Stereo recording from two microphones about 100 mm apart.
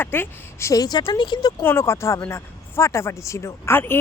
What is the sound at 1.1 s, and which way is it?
Speech, 50° left (ahead or behind).